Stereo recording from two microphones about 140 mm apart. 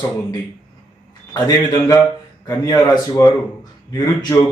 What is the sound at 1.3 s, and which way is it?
Speech, 30° left (ahead or behind).